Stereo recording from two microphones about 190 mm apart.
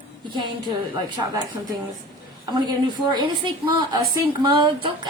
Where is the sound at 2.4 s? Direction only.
25° right (ahead or behind).